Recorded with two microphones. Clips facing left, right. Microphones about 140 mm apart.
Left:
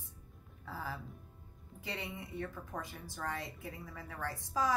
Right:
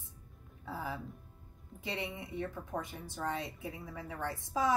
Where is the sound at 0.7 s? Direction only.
20° right (ahead or behind).